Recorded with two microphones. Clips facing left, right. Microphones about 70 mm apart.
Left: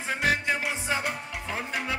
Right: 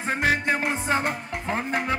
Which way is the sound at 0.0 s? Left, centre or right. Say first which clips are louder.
Right 3 dB; right.